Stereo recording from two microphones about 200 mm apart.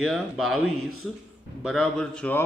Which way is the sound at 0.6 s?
90° right.